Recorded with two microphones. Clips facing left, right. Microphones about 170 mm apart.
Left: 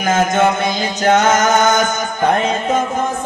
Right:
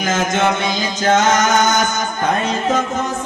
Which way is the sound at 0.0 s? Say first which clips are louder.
Left 3 dB; 55° left (ahead or behind).